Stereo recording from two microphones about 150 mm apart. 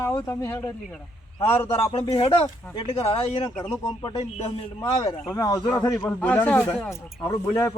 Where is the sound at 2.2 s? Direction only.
35° left (ahead or behind).